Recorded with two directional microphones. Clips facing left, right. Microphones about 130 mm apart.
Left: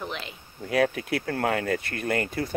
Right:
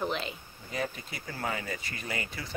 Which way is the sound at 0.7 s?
70° left (ahead or behind).